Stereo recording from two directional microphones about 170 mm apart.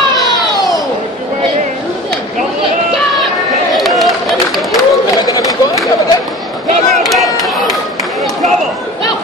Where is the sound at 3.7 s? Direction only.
Centre (ahead or behind).